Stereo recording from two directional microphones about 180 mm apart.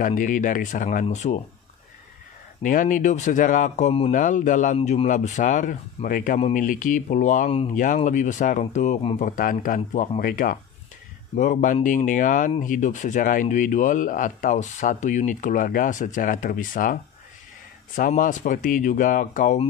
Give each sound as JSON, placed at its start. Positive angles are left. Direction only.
{"t": 0.0, "sound": "speech", "side_deg": 45}
{"t": 2.6, "sound": "speech", "side_deg": 50}